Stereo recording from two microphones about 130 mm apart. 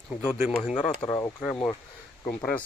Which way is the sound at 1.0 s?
20° left (ahead or behind).